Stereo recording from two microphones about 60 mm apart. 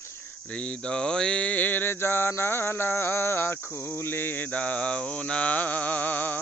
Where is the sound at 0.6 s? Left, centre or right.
Centre.